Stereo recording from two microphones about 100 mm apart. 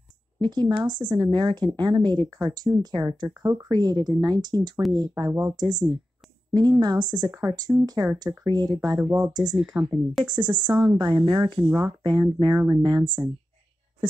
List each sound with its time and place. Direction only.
0.4 s speech: 45° right (ahead or behind)